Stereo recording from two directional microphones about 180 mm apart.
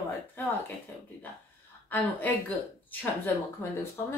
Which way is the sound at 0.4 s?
10° left (ahead or behind).